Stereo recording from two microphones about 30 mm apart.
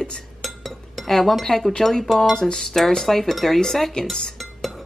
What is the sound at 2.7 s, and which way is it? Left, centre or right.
Speech, centre.